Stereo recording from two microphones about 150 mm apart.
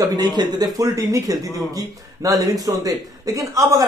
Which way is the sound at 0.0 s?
25° right (ahead or behind).